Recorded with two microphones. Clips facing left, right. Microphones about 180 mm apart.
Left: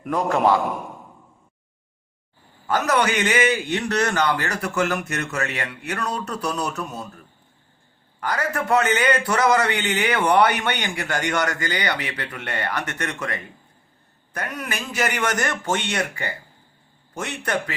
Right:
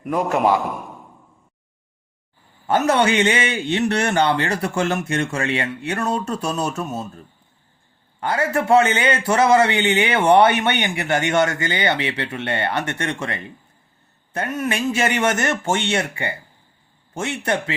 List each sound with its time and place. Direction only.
0.1 s a man's voice: 15° right (ahead or behind)
2.6 s a man's voice: 25° right (ahead or behind)
8.2 s a man's voice: 25° right (ahead or behind)